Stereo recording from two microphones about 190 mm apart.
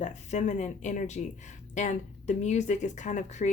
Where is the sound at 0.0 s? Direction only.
40° left (ahead or behind).